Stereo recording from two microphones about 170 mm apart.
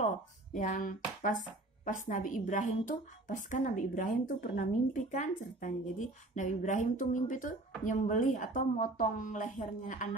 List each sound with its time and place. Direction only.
0.0 s speech: 45° left (ahead or behind)